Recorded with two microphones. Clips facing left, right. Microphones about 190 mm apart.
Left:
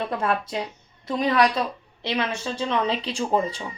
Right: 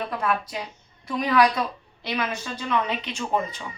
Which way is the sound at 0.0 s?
25° left (ahead or behind).